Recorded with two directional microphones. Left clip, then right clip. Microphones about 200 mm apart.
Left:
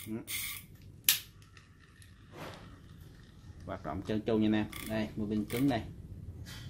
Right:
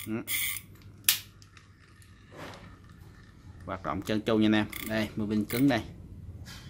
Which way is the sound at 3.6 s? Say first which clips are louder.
Right 5 dB; 5° right (ahead or behind).